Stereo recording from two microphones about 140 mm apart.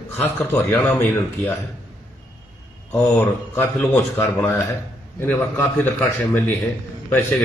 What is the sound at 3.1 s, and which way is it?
Speech, 15° left (ahead or behind).